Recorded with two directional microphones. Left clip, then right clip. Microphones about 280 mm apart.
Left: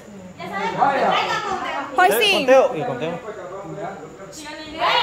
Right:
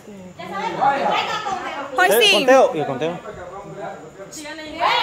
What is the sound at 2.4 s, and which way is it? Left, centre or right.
Speech, right.